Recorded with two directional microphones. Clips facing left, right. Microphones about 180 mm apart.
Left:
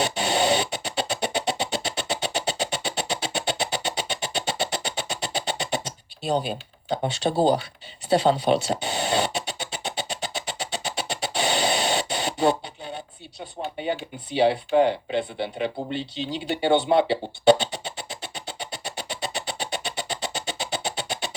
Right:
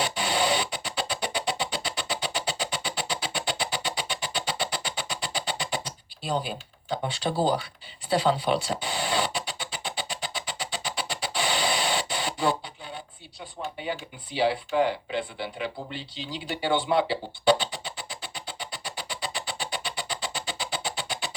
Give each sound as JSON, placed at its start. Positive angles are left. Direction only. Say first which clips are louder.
{"t": 0.0, "sound": "music", "louder": "left 4 dB", "side_deg": 25}
{"t": 7.0, "sound": "speech", "louder": "left 5 dB", "side_deg": 25}
{"t": 8.1, "sound": "a sound", "louder": "left 4 dB", "side_deg": 25}